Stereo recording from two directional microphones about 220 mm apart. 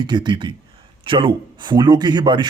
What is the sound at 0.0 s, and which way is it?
Speech, 20° right (ahead or behind).